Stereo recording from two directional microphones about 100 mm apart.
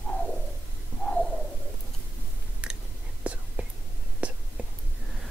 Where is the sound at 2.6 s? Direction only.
10° right (ahead or behind).